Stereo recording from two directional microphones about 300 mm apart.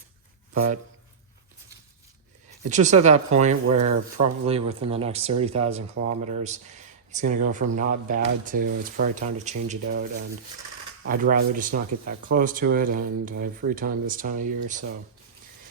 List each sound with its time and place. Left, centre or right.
2.6 s speech: right
3.7 s speech: right
4.2 s speech: centre
11.1 s speech: right